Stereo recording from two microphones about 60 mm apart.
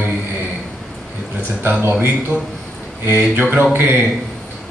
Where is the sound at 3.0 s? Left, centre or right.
Right.